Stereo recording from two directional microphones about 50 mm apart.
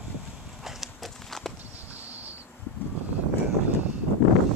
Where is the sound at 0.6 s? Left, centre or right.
Centre.